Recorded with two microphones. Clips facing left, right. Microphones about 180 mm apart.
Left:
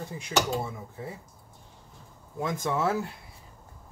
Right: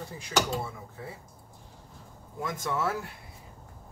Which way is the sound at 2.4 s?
20° left (ahead or behind).